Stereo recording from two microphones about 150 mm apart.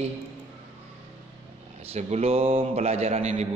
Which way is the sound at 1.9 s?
45° right (ahead or behind).